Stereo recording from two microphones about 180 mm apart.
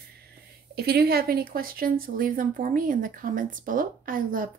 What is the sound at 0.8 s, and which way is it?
A woman's voice, 60° right (ahead or behind).